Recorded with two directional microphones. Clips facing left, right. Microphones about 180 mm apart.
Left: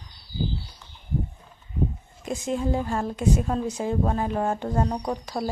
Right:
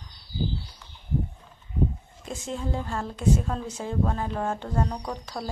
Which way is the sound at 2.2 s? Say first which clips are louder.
Left 6 dB; 15° left (ahead or behind).